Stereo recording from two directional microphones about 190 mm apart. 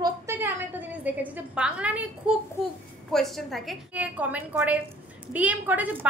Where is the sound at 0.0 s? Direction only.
15° right (ahead or behind).